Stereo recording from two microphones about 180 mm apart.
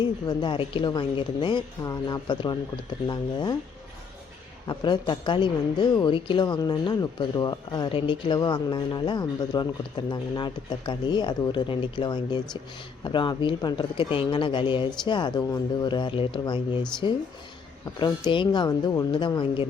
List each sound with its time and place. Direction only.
0.0 s a woman's voice: 25° left (ahead or behind)
4.6 s a woman's voice: 25° left (ahead or behind)